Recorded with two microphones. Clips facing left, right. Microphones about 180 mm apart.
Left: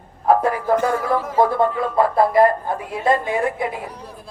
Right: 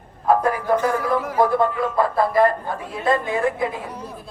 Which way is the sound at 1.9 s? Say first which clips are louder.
Left 4 dB; 25° left (ahead or behind).